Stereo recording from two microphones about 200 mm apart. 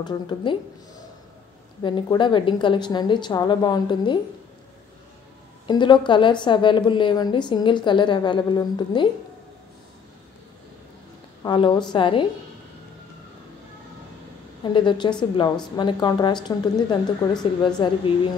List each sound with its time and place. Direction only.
0.0 s a woman's voice: 25° left (ahead or behind)
1.8 s a woman's voice: 25° left (ahead or behind)
5.7 s a woman's voice: 25° left (ahead or behind)
11.4 s a woman's voice: 20° left (ahead or behind)
14.6 s a woman's voice: 25° left (ahead or behind)